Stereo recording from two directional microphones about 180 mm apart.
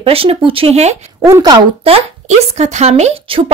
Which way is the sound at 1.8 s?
35° right (ahead or behind).